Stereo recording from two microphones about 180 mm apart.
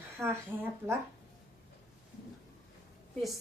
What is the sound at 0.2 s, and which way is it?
Speech, 15° right (ahead or behind).